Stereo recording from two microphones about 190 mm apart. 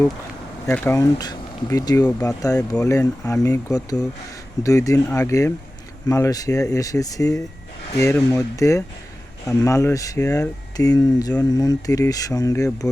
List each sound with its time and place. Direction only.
0.7 s speech: 10° left (ahead or behind)